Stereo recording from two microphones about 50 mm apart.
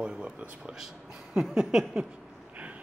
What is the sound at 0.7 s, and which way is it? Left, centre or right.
Speech, centre.